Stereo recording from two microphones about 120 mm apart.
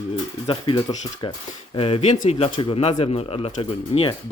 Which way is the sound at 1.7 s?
50° left (ahead or behind).